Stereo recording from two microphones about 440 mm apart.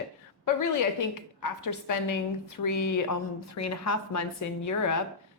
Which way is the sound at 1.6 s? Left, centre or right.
Left.